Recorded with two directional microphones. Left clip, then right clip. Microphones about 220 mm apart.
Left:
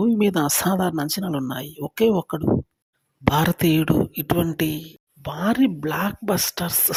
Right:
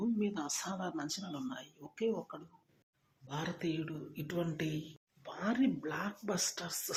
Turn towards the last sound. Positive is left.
turn(degrees=45)  # may be behind; listen again after turning